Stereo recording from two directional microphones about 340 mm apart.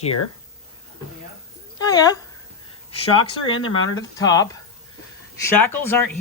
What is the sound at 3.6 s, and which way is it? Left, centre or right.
Speech, centre.